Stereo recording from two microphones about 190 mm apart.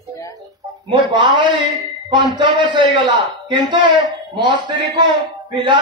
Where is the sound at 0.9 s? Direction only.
25° right (ahead or behind).